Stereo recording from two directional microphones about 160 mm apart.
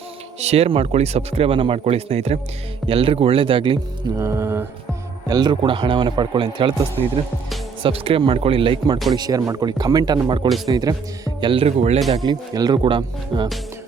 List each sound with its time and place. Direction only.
0.3 s speech: 40° right (ahead or behind)
4.2 s a sound: 15° right (ahead or behind)
5.3 s a man's voice: 25° right (ahead or behind)
7.8 s a man's voice: 35° right (ahead or behind)
12.2 s a man's voice: 25° right (ahead or behind)